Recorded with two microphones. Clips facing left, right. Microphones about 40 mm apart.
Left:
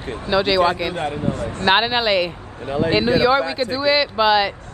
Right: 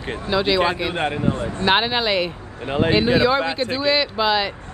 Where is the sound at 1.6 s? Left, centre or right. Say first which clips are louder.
Left 2 dB; centre.